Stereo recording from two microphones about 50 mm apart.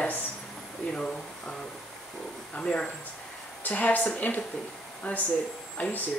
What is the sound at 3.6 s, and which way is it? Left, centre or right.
A woman's voice, left.